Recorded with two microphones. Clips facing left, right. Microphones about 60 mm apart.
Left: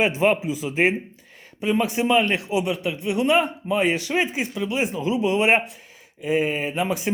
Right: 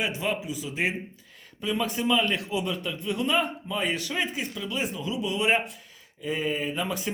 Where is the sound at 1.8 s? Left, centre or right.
Left.